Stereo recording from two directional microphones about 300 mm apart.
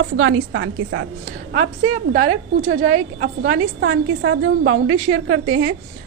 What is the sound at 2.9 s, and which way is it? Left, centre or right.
A woman's voice, right.